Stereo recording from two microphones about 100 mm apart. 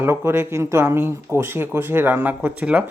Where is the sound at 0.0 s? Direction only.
25° right (ahead or behind).